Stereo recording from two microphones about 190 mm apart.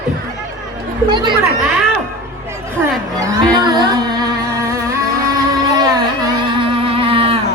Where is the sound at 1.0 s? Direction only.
25° right (ahead or behind).